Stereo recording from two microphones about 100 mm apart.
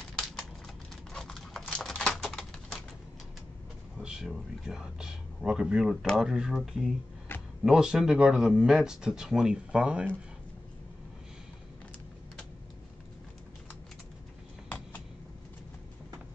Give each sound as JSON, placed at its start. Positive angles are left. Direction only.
{"t": 1.1, "sound": "typing", "side_deg": 5}
{"t": 4.0, "sound": "a man's voice", "side_deg": -5}
{"t": 7.3, "sound": "a sound", "side_deg": 25}
{"t": 7.6, "sound": "speech", "side_deg": -5}